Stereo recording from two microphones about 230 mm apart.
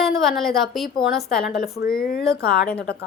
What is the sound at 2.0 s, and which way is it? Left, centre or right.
Speech, left.